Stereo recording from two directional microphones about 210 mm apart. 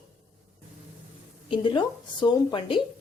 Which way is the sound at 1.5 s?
25° left (ahead or behind).